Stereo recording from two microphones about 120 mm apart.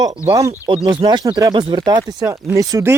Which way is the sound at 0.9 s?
35° right (ahead or behind).